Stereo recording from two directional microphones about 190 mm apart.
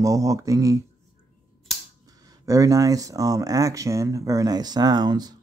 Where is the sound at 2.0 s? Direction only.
20° right (ahead or behind).